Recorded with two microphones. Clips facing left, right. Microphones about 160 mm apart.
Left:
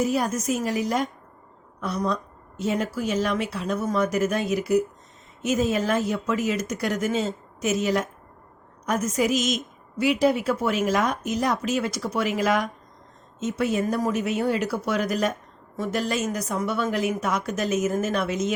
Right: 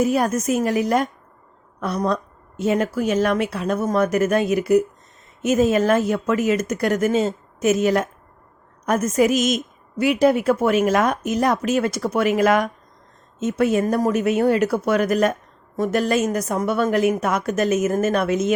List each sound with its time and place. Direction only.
0.0 s a woman's voice: 55° right (ahead or behind)